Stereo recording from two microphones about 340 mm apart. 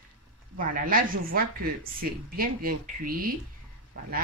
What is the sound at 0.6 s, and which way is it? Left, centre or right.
A woman's voice, right.